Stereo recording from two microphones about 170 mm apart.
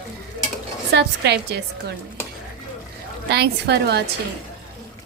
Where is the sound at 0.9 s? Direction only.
80° right.